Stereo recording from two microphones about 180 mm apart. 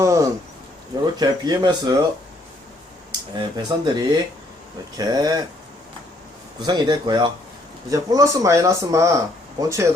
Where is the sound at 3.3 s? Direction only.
25° right (ahead or behind).